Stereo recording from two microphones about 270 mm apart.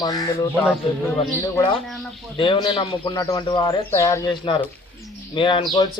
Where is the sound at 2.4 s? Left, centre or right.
Centre.